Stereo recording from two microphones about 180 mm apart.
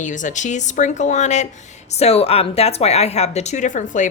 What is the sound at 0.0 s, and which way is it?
A woman's voice, 45° left (ahead or behind).